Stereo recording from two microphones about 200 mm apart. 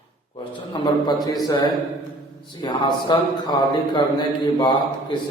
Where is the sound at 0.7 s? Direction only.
20° left (ahead or behind).